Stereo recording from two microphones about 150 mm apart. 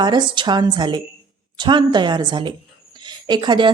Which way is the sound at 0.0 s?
30° right (ahead or behind).